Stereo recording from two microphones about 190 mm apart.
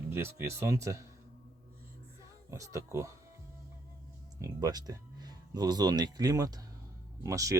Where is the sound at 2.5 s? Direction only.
15° right (ahead or behind).